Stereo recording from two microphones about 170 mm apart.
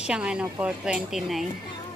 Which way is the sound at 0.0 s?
5° right (ahead or behind).